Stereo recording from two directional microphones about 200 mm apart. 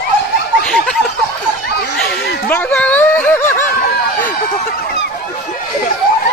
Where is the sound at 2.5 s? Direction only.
5° left (ahead or behind).